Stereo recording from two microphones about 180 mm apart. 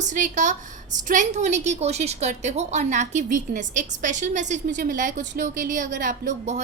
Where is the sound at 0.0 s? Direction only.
45° right (ahead or behind).